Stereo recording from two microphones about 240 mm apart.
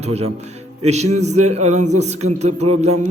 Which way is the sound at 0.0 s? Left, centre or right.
Right.